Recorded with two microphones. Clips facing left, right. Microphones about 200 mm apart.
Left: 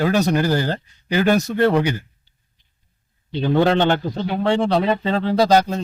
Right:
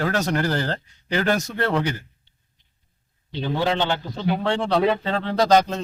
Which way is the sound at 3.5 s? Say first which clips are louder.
Left 7 dB; 55° left (ahead or behind).